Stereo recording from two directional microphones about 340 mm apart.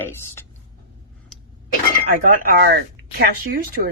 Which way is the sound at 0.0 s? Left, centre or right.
Centre.